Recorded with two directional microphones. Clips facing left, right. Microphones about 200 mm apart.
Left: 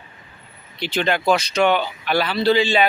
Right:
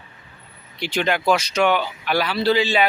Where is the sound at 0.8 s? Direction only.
10° right (ahead or behind).